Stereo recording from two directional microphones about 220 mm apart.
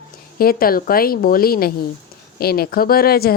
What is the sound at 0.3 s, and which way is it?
A woman's voice, 40° left (ahead or behind).